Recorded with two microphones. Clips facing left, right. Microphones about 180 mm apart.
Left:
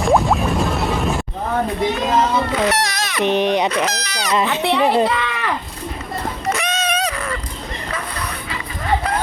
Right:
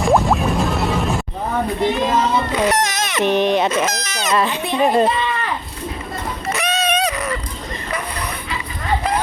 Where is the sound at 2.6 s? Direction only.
20° right (ahead or behind).